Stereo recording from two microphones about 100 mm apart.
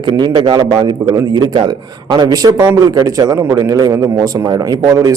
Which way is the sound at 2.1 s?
40° right (ahead or behind).